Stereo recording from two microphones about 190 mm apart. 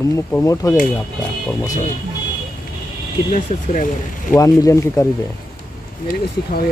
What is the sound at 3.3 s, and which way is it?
Speech, 40° left (ahead or behind).